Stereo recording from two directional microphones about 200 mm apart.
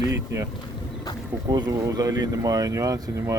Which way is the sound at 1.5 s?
20° right (ahead or behind).